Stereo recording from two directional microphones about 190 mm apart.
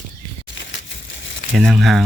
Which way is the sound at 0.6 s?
75° left (ahead or behind).